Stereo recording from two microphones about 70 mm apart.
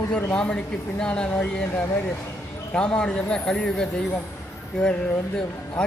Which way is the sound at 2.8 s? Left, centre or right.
Centre.